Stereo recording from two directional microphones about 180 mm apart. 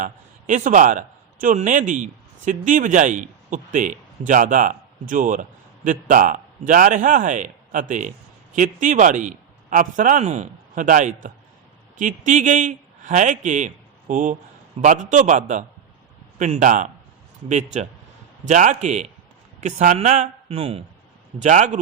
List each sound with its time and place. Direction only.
0.0 s a man's voice: 45° right (ahead or behind)
21.4 s a man's voice: 40° right (ahead or behind)